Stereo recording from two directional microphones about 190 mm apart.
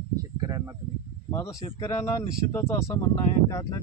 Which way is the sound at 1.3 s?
15° left (ahead or behind).